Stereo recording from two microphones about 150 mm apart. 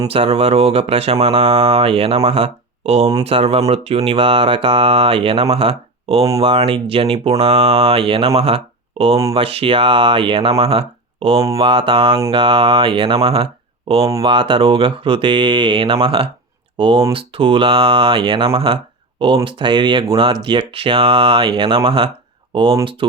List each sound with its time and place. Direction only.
0.1 s speech: 40° right (ahead or behind)